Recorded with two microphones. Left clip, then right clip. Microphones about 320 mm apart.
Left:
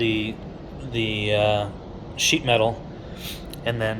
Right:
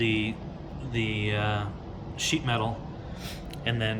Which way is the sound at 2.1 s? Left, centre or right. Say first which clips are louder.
Left 8 dB; right.